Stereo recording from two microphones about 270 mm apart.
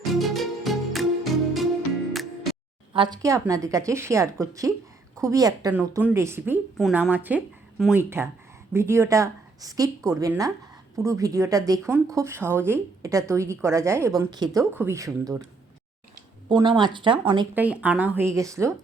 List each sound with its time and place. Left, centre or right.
0.1 s music: centre
2.9 s a woman's voice: centre
16.5 s a woman's voice: centre
17.5 s a woman's voice: centre